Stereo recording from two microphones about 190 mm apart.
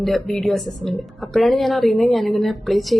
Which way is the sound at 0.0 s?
Centre (ahead or behind).